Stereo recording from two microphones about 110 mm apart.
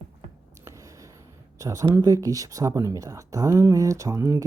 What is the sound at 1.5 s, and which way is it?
Speech, 30° right (ahead or behind).